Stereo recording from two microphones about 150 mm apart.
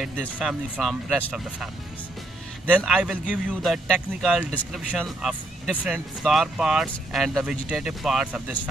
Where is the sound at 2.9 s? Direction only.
5° right (ahead or behind).